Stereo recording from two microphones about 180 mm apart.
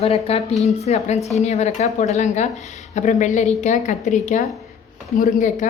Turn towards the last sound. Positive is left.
turn(degrees=45)  # may be behind; listen again after turning